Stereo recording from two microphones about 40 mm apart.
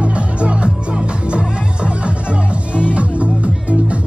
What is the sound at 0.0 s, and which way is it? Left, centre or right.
Music, right.